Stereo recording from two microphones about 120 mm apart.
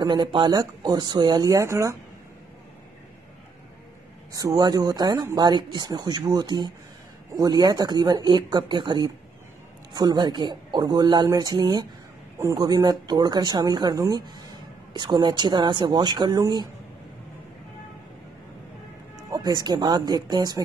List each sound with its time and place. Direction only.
0.0 s speech: 35° right (ahead or behind)
4.3 s speech: 30° right (ahead or behind)
19.3 s speech: 35° right (ahead or behind)